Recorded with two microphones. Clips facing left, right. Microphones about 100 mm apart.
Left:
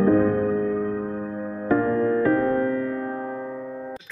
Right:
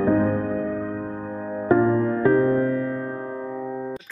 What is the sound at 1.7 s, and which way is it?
Music, 20° right (ahead or behind).